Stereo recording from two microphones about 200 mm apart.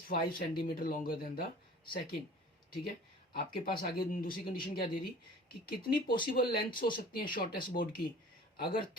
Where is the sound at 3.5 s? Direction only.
45° left (ahead or behind).